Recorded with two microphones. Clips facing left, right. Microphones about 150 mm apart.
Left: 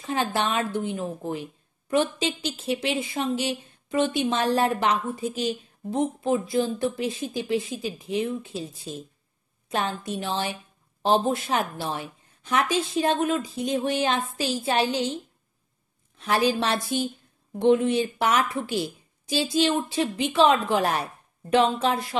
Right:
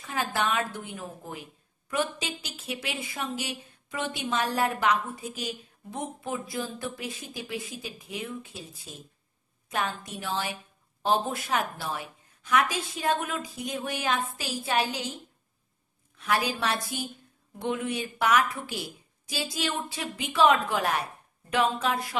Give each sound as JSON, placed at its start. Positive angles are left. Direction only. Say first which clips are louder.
{"t": 0.0, "sound": "speech", "louder": "left 4 dB", "side_deg": 25}
{"t": 16.2, "sound": "speech", "louder": "left 5 dB", "side_deg": 30}